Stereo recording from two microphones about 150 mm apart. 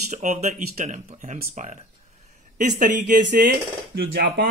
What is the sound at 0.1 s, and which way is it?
Speech, 50° right (ahead or behind).